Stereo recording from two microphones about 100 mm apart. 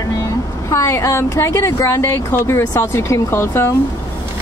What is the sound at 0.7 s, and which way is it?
Speech, 30° left (ahead or behind).